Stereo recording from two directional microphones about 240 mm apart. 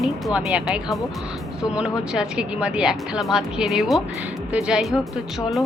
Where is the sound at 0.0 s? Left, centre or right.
Centre.